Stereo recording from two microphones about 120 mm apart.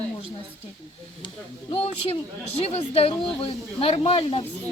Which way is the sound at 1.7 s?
55° left (ahead or behind).